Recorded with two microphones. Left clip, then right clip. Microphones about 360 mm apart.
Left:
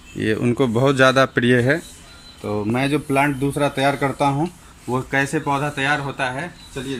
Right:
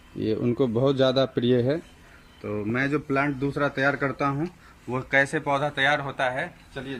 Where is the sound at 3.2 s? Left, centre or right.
Left.